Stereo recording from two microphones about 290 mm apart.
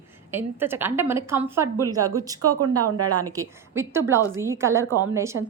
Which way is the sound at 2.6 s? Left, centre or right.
Right.